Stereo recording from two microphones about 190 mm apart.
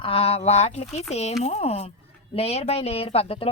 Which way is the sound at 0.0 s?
30° left (ahead or behind).